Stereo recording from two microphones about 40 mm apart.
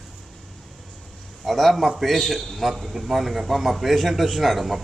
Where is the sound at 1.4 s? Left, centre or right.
Centre.